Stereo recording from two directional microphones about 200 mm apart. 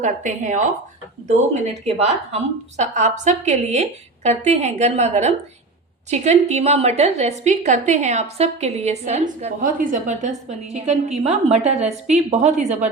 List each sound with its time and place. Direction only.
0.0 s a woman's voice: 35° right (ahead or behind)